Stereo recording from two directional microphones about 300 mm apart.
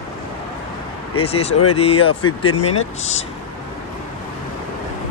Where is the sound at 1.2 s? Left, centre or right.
Centre.